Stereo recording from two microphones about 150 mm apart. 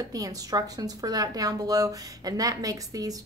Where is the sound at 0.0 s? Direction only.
25° right (ahead or behind).